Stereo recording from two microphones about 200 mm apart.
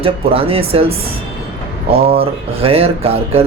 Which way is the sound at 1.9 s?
50° right (ahead or behind).